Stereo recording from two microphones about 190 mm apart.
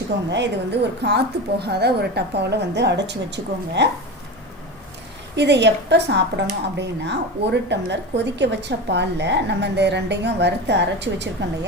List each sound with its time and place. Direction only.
0.3 s a woman's voice: 65° right (ahead or behind)
5.4 s a woman's voice: 65° right (ahead or behind)